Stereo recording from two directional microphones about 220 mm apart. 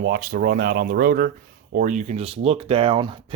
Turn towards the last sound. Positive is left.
turn(degrees=-25)  # may be behind; listen again after turning